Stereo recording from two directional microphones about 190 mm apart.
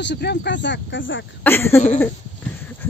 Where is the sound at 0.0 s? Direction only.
60° left (ahead or behind); by 1.2 s 80° left.